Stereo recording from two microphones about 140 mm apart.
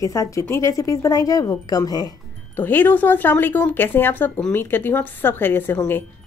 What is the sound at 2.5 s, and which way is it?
Speech, 15° left (ahead or behind).